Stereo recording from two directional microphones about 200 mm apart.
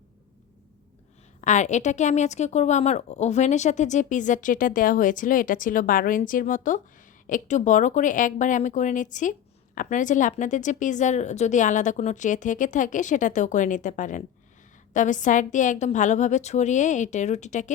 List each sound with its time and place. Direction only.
1.4 s a woman's voice: 35° left (ahead or behind)